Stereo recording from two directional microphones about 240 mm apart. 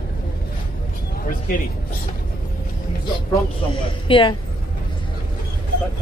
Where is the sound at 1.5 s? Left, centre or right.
Left.